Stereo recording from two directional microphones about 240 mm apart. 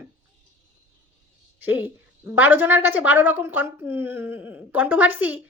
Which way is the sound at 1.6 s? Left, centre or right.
Centre.